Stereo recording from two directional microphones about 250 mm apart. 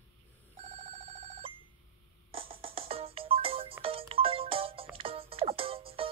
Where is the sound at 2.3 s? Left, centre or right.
Right.